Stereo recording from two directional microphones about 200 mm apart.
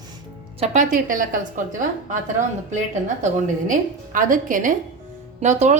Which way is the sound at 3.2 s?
40° right (ahead or behind).